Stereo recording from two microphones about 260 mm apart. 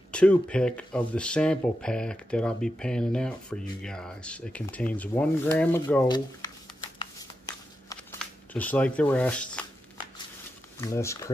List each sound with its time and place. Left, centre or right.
0.1 s speech: centre
6.0 s speech: centre
7.0 s shuffling cards: centre
10.8 s speech: centre